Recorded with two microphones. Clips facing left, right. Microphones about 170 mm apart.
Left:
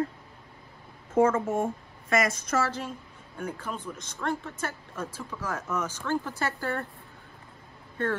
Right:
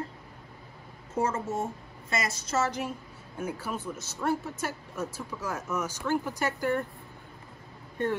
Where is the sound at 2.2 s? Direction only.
30° right (ahead or behind).